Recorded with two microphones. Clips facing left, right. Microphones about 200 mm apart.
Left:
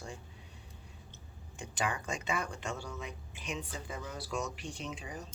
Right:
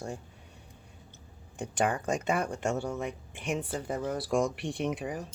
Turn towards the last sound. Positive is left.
turn(degrees=-55)  # may be behind; listen again after turning